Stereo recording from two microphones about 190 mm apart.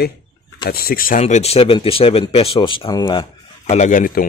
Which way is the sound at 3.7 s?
40° left (ahead or behind).